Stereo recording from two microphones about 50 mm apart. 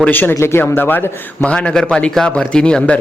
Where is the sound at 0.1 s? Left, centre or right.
Left.